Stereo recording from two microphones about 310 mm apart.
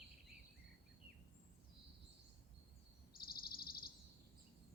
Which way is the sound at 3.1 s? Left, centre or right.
Left.